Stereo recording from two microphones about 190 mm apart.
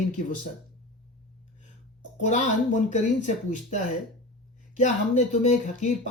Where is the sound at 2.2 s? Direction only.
40° left (ahead or behind).